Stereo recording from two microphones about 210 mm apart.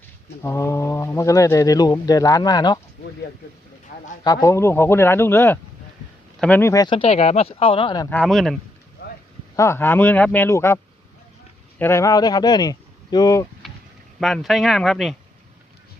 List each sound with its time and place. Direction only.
0.4 s speech: 15° left (ahead or behind)
4.2 s speech: 20° left (ahead or behind)
8.1 s speech: centre (ahead or behind)
9.6 s speech: 10° left (ahead or behind)
11.8 s speech: 15° left (ahead or behind)
13.6 s a sound: centre (ahead or behind)
14.2 s speech: centre (ahead or behind)